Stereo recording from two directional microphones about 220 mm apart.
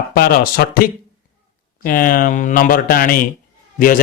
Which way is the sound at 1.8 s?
40° left (ahead or behind).